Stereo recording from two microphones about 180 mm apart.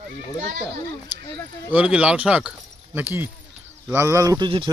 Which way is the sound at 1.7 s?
5° right (ahead or behind).